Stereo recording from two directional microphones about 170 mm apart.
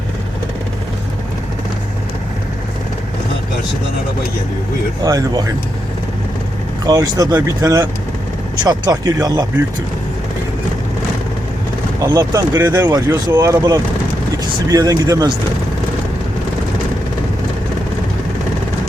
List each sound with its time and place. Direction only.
5.0 s speech: 20° right (ahead or behind)
6.8 s speech: 20° right (ahead or behind)
12.1 s speech: 20° right (ahead or behind)